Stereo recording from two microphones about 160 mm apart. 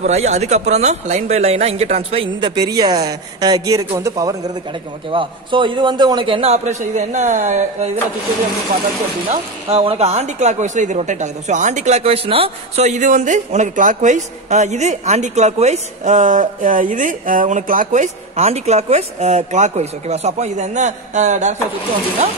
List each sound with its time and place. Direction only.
0.0 s speech: 45° right (ahead or behind)
9.7 s speech: 35° right (ahead or behind)